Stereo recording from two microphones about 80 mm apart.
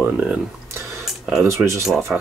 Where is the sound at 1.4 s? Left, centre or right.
Right.